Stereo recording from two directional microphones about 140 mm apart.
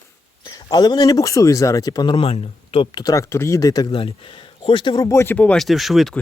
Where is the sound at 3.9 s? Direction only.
40° left (ahead or behind); by 6.2 s centre (ahead or behind).